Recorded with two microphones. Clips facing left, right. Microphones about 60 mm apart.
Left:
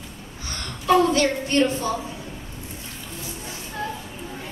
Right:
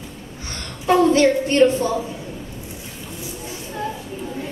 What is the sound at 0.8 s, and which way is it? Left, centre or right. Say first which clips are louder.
A woman's voice: right 4 dB; right.